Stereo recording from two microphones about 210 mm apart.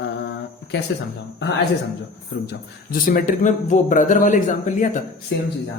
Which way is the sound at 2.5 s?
45° left (ahead or behind).